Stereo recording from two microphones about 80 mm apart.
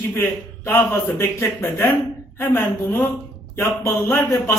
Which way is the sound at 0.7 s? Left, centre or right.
Left.